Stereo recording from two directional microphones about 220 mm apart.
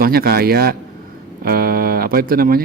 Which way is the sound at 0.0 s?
45° right (ahead or behind).